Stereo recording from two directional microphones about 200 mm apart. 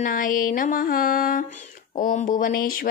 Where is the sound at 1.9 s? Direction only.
40° left (ahead or behind).